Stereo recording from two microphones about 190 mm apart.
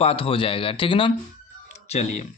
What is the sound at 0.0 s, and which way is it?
A man's voice, 30° left (ahead or behind).